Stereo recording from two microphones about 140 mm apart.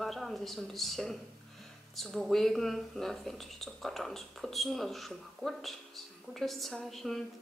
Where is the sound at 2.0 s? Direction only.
Centre (ahead or behind).